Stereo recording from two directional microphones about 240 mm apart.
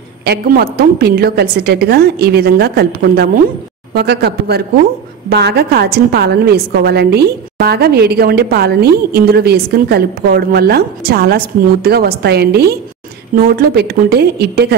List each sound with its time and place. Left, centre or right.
0.2 s a woman's voice: right